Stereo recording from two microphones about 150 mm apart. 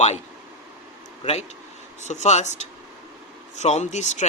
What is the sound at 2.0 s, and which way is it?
Speech, 50° left (ahead or behind).